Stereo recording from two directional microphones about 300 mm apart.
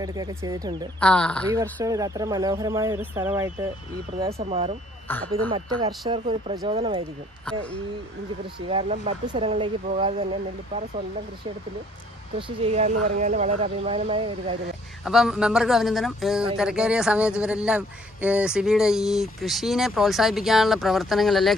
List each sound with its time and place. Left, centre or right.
0.0 s speech: centre
0.9 s a man's voice: centre
1.5 s speech: centre
4.2 s speech: right
5.1 s speech: centre
5.5 s speech: centre
7.5 s a man's voice: centre
8.5 s speech: centre
12.4 s speech: centre
15.0 s a man's voice: centre